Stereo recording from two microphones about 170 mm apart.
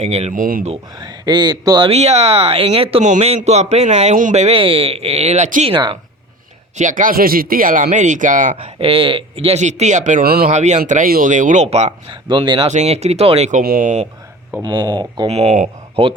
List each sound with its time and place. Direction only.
0.0 s speech: 40° right (ahead or behind)
0.3 s speech: 55° right (ahead or behind)
0.9 s speech: 25° right (ahead or behind)
1.9 s speech: 40° right (ahead or behind)
5.7 s speech: 25° right (ahead or behind)
6.7 s speech: 50° right (ahead or behind)
8.5 s speech: 35° right (ahead or behind); by 10.4 s 55° right (ahead or behind)
10.5 s speech: 40° right (ahead or behind)
12.3 s speech: 25° right (ahead or behind)
12.7 s speech: 40° right (ahead or behind)
13.6 s speech: 55° right (ahead or behind)
14.6 s speech: 25° right (ahead or behind)
15.3 s a man's voice: 40° right (ahead or behind)